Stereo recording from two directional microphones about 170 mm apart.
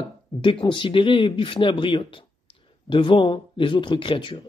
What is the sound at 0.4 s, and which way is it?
Speech, 30° left (ahead or behind).